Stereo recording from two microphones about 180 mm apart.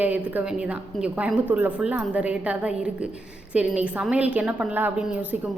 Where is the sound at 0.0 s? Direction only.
10° right (ahead or behind).